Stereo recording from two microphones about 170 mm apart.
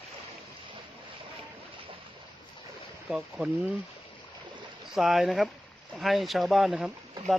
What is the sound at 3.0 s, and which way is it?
Speech, 5° right (ahead or behind).